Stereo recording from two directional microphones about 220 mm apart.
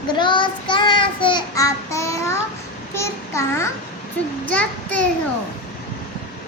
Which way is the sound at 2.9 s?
10° left (ahead or behind).